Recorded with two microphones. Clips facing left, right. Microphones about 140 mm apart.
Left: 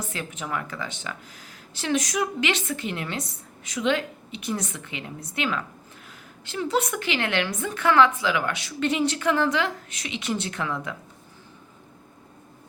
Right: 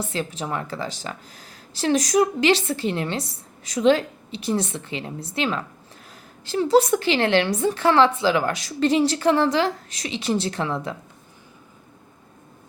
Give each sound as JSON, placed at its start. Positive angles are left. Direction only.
{"t": 0.0, "sound": "a woman's voice", "side_deg": -30}